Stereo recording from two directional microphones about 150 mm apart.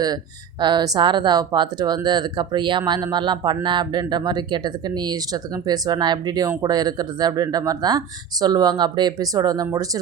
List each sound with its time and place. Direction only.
0.6 s speech: 30° right (ahead or behind)